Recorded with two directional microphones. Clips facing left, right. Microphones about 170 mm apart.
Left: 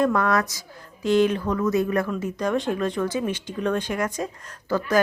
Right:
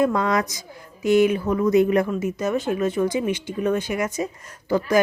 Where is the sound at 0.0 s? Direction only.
15° right (ahead or behind).